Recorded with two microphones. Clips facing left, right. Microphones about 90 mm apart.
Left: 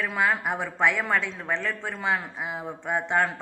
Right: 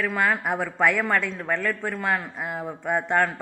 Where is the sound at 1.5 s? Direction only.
20° left (ahead or behind).